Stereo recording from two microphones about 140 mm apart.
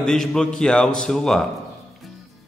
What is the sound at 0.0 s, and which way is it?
A man's voice, 5° left (ahead or behind).